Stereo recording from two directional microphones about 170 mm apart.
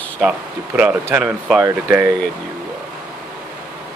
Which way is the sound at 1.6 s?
15° right (ahead or behind).